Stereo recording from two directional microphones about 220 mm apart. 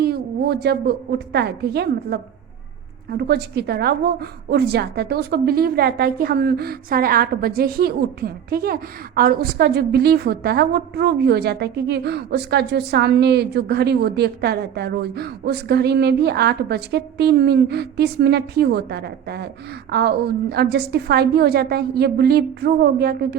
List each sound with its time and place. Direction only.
0.0 s a woman's voice: 45° right (ahead or behind)